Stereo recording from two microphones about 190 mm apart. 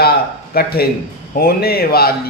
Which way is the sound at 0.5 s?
55° left (ahead or behind).